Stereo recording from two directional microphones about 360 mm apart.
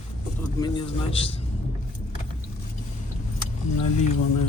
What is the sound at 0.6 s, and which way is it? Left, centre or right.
Speech, centre.